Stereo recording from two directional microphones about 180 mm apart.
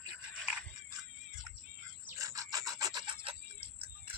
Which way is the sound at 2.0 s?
15° right (ahead or behind).